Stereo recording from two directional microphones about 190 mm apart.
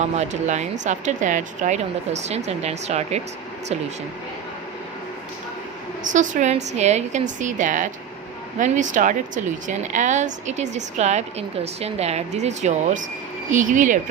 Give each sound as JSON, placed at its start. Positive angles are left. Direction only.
{"t": 0.2, "sound": "a woman's voice", "side_deg": -35}
{"t": 6.1, "sound": "a woman's voice", "side_deg": -40}